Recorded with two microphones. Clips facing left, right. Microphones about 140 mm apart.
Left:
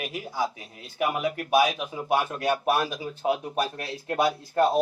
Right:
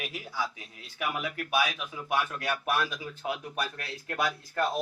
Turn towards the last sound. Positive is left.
turn(degrees=30)  # may be behind; listen again after turning